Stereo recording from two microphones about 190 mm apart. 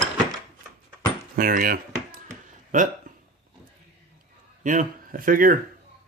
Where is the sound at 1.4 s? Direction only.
50° right (ahead or behind).